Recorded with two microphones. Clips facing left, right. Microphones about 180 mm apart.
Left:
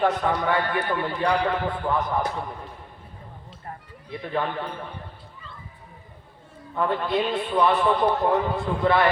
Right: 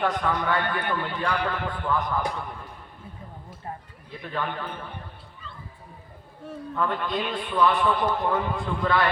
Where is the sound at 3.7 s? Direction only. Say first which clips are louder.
Right 2 dB; 20° right (ahead or behind).